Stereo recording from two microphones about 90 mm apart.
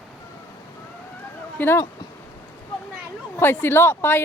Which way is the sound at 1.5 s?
25° left (ahead or behind).